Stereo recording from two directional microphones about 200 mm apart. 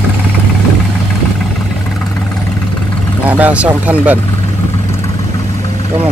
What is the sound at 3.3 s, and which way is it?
Speech, 5° right (ahead or behind).